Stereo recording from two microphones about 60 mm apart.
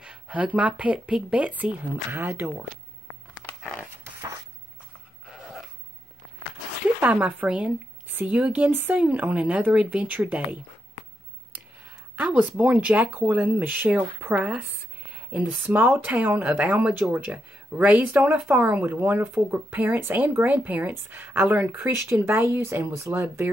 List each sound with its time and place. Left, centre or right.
0.0 s speech: centre
2.2 s speech: right
5.2 s a sound: centre
7.0 s speech: right
11.8 s speech: right
15.6 s speech: right
22.8 s speech: right